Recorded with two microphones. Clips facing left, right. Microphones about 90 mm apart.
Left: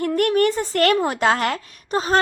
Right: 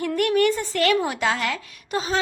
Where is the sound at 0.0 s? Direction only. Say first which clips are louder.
Left 2 dB; 45° left (ahead or behind).